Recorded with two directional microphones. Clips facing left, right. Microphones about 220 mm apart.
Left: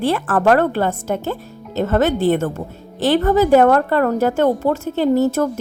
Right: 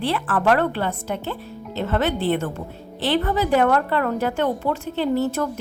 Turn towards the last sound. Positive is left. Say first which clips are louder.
# left 6 dB
turn(degrees=45)  # may be behind; listen again after turning